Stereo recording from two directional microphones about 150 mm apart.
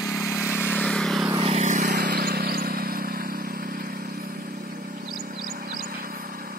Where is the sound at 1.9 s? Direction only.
90° right.